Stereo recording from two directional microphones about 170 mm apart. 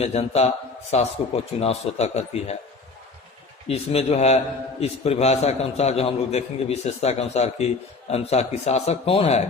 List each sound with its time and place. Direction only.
0.0 s a man's voice: 40° left (ahead or behind)
3.7 s a man's voice: 35° left (ahead or behind)